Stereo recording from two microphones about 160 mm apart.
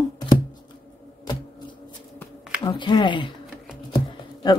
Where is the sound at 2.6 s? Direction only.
30° left (ahead or behind).